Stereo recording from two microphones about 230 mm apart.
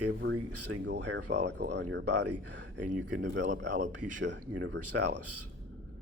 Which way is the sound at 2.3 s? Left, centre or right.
Right.